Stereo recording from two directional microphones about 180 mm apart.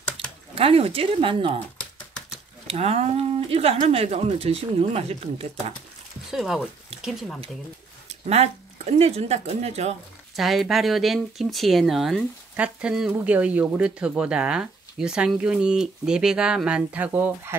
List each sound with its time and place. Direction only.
0.2 s a sound: 30° right (ahead or behind)
0.6 s speech: 30° right (ahead or behind)
2.6 s speech: 35° right (ahead or behind)
6.3 s speech: centre (ahead or behind)
8.1 s speech: 35° right (ahead or behind)
10.3 s speech: centre (ahead or behind)